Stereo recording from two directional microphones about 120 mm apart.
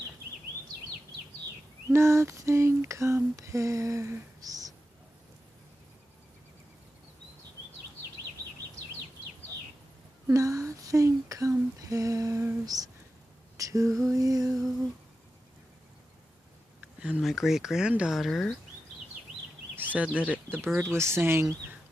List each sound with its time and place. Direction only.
1.9 s lullaby: 20° right (ahead or behind)
10.2 s lullaby: 25° right (ahead or behind)
13.6 s female singing: 30° right (ahead or behind)
14.1 s lullaby: 30° right (ahead or behind)
16.8 s speech: 10° right (ahead or behind)
19.7 s speech: 15° right (ahead or behind)
20.7 s lullaby: 20° right (ahead or behind)